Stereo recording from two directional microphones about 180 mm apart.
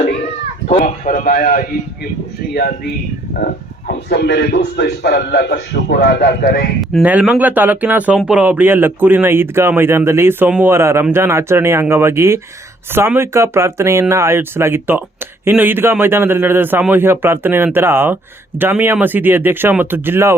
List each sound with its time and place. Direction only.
0.7 s a man's voice: 40° left (ahead or behind)
6.9 s a man's voice: 10° right (ahead or behind)